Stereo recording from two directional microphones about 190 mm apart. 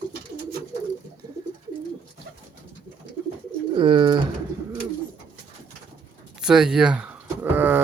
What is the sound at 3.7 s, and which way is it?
Speech, 25° right (ahead or behind).